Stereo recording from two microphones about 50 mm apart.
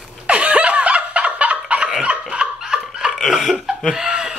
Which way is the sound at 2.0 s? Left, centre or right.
Centre.